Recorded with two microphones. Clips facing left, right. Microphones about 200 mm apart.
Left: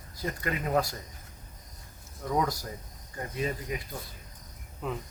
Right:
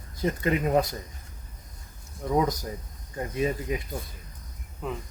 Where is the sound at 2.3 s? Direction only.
20° right (ahead or behind).